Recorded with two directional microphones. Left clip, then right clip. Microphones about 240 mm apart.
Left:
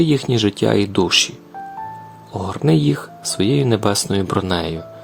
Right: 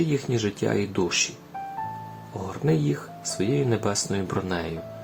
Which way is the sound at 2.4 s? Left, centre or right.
Left.